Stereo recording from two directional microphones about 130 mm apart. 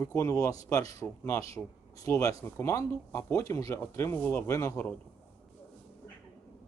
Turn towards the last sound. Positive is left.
turn(degrees=20)  # may be behind; listen again after turning